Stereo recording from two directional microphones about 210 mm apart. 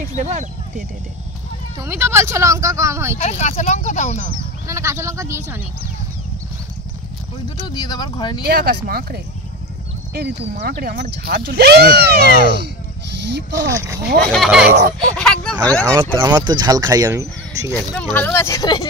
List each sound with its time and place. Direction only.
0.1 s speech: 35° right (ahead or behind)
1.8 s speech: 10° right (ahead or behind)
3.2 s speech: 35° left (ahead or behind)
4.6 s speech: 10° right (ahead or behind)
7.5 s speech: 20° left (ahead or behind)
8.5 s speech: 45° right (ahead or behind)
13.6 s speech: 15° right (ahead or behind)
14.0 s speech: 50° right (ahead or behind)
14.3 s speech: centre (ahead or behind)
15.9 s speech: 15° right (ahead or behind)
17.7 s speech: 5° left (ahead or behind)